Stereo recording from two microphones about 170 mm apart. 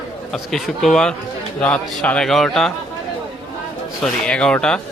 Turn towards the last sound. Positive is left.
turn(degrees=5)  # may be behind; listen again after turning